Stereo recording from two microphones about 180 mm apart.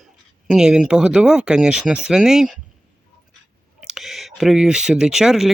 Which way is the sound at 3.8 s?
Centre (ahead or behind).